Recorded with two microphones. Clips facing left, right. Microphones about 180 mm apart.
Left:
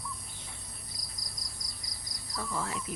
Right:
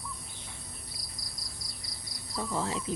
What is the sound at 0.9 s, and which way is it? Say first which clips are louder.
Cricket: right 1 dB; 5° right (ahead or behind).